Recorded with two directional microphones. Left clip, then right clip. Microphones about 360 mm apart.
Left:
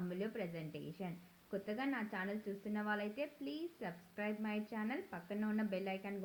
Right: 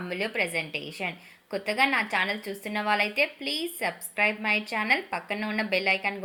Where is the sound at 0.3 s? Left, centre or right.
Right.